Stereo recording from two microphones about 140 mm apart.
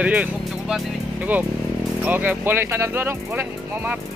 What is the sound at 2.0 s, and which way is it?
Speech, 10° right (ahead or behind).